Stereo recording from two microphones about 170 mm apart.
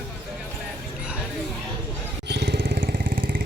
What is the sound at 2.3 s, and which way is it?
Vehicle, 75° right (ahead or behind).